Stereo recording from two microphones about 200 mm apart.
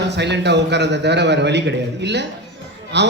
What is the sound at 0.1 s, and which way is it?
Speech, 60° right (ahead or behind).